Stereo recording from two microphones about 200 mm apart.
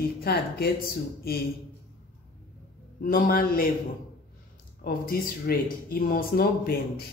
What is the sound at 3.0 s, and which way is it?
Speech, 45° left (ahead or behind).